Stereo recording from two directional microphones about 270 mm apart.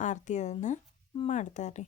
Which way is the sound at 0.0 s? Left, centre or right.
Left.